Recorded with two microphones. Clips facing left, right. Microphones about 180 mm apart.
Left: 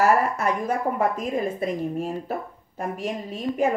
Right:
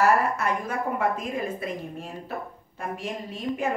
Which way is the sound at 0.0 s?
40° left (ahead or behind).